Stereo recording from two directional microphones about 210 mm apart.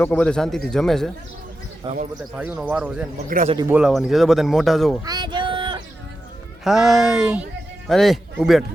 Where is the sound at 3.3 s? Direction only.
40° right (ahead or behind).